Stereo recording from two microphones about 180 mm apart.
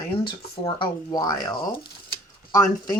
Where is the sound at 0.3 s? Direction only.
25° left (ahead or behind).